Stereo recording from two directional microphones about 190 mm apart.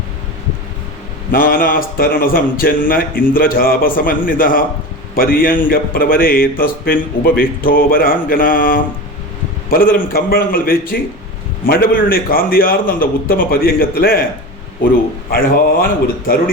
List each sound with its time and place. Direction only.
1.3 s a man's voice: 50° left (ahead or behind)
15.3 s a man's voice: 50° left (ahead or behind)